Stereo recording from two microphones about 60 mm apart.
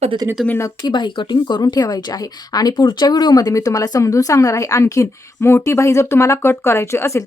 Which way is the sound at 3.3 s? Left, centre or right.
Left.